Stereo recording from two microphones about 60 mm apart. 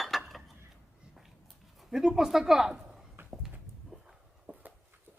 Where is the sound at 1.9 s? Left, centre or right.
Centre.